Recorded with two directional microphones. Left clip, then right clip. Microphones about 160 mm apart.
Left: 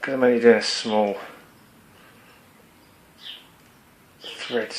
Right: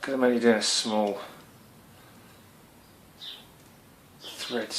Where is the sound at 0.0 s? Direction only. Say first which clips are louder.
Left 6 dB; 40° left (ahead or behind).